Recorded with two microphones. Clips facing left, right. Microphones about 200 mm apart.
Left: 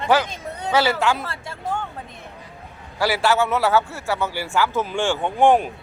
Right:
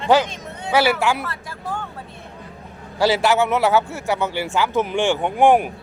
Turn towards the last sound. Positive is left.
turn(degrees=-15)  # may be behind; listen again after turning